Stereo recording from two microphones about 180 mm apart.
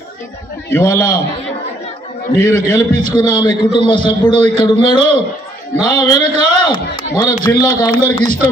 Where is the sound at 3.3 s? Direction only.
25° left (ahead or behind).